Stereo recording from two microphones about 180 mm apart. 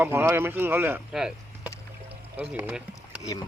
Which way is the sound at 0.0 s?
10° right (ahead or behind).